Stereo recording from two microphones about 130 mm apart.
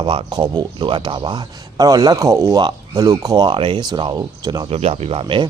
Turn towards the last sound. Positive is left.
turn(degrees=-45)  # may be behind; listen again after turning